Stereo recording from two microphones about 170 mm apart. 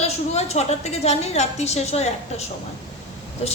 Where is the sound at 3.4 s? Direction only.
40° left (ahead or behind).